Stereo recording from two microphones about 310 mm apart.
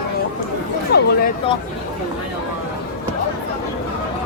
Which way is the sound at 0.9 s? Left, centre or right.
Left.